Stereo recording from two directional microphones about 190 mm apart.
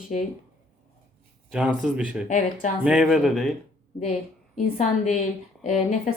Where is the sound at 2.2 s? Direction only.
40° left (ahead or behind).